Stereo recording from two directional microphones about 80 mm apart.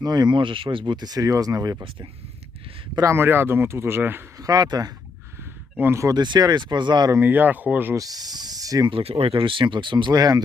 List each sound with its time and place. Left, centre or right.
0.0 s speech: right
3.0 s speech: right
4.4 s speech: right
5.8 s speech: right
6.1 s speech: right
7.2 s speech: right
7.9 s speech: right
8.9 s speech: right